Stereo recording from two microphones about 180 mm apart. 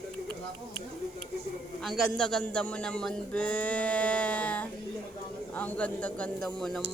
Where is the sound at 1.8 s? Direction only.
5° left (ahead or behind).